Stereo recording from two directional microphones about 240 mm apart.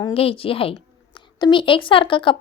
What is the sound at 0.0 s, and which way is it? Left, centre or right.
A woman's voice, left.